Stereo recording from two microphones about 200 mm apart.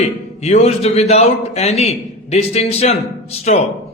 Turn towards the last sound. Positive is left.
turn(degrees=30)  # may be behind; listen again after turning